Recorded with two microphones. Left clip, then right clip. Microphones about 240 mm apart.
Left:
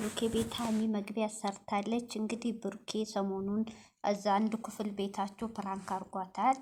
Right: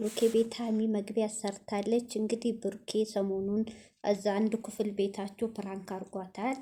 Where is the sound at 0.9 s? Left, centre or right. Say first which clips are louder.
Right 4 dB; centre.